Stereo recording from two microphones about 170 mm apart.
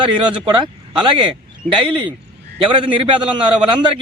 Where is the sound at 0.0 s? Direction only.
30° right (ahead or behind).